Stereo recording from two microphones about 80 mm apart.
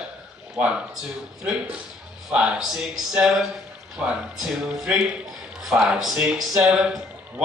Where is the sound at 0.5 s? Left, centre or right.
Centre.